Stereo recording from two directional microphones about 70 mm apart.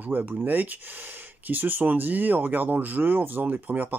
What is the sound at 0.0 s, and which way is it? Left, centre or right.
Speech, right.